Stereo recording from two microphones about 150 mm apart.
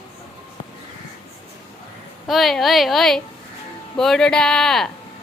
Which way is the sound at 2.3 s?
Centre (ahead or behind).